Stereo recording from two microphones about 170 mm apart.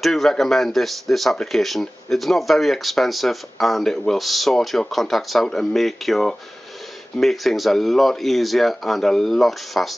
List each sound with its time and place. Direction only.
0.0 s speech: centre (ahead or behind)